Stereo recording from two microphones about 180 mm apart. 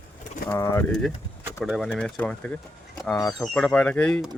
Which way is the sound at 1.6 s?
5° right (ahead or behind).